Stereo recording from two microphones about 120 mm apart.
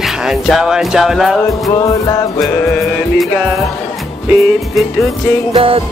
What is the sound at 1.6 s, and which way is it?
Music, 30° left (ahead or behind).